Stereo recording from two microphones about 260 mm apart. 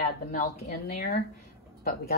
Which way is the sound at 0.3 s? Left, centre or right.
Left.